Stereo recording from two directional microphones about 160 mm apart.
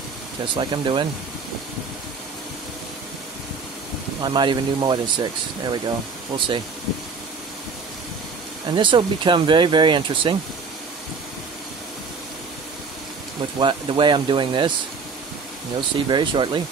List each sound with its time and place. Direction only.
0.6 s speech: 30° right (ahead or behind)
4.2 s speech: 30° right (ahead or behind)
8.7 s speech: 30° right (ahead or behind)
13.6 s speech: 30° right (ahead or behind)
16.1 s speech: 30° right (ahead or behind)